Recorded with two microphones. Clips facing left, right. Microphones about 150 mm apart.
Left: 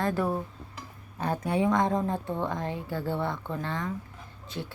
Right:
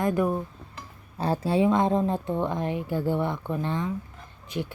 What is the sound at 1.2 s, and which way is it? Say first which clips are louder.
Speech: right 4 dB; 30° right (ahead or behind).